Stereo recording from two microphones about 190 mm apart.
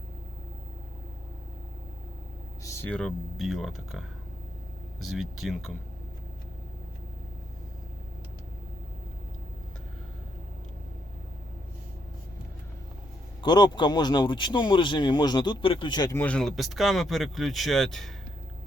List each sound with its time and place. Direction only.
2.6 s speech: 10° left (ahead or behind)
13.4 s speech: 25° left (ahead or behind)
16.1 s speech: 5° left (ahead or behind)